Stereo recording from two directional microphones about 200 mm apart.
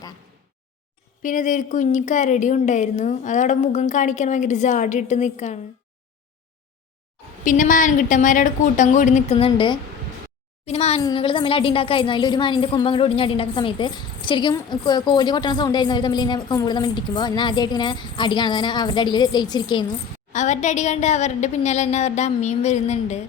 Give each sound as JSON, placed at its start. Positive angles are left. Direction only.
{"t": 1.2, "sound": "a woman's voice", "side_deg": 40}
{"t": 7.4, "sound": "a woman's voice", "side_deg": 40}
{"t": 20.3, "sound": "a woman's voice", "side_deg": 35}